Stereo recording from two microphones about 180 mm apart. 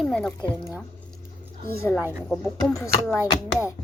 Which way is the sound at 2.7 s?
20° left (ahead or behind).